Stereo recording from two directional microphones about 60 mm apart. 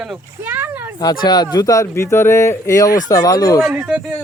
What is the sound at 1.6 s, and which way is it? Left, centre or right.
Speech, left.